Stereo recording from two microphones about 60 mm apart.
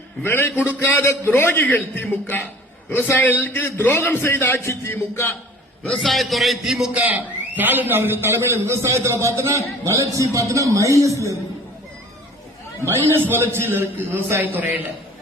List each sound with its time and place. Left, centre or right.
0.2 s a man's voice: left
6.0 s a man's voice: centre
6.9 s a man's voice: right
12.8 s a man's voice: right